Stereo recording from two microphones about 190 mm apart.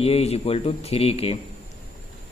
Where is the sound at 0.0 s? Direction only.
30° left (ahead or behind).